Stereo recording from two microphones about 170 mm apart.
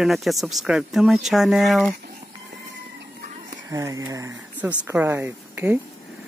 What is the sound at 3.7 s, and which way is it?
Speech, 20° right (ahead or behind).